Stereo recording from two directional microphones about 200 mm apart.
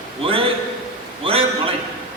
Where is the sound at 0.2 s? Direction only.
25° right (ahead or behind).